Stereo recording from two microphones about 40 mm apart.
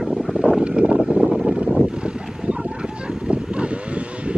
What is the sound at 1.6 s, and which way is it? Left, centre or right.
Vehicle, right.